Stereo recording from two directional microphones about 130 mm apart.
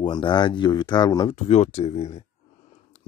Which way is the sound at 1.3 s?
55° left (ahead or behind).